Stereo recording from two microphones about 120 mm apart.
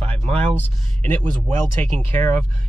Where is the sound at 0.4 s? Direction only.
15° left (ahead or behind).